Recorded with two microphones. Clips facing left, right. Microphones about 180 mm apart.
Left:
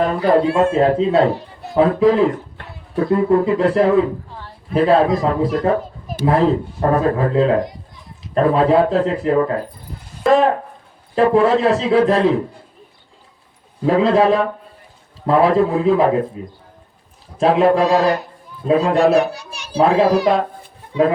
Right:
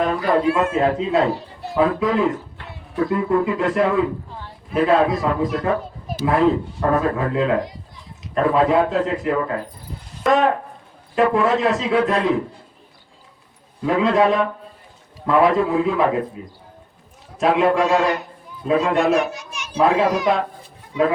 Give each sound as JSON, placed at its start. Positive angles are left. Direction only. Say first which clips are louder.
{"t": 0.0, "sound": "a man's voice", "louder": "left 3 dB", "side_deg": 30}
{"t": 13.8, "sound": "a man's voice", "louder": "left 3 dB", "side_deg": 30}
{"t": 17.3, "sound": "a man's voice", "louder": "left 3 dB", "side_deg": 30}